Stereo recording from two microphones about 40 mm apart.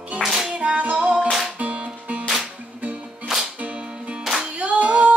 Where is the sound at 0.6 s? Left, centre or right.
Right.